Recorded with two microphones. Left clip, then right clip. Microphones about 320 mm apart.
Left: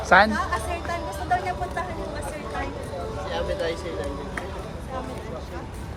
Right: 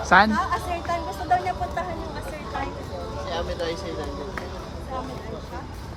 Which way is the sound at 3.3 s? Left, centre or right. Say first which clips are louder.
Left 1 dB; right.